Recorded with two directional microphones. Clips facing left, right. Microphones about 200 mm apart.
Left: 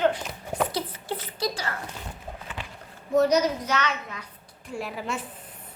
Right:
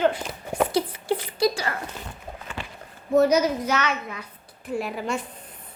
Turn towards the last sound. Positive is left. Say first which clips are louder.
# right 4 dB
turn(degrees=0)  # may be behind; listen again after turning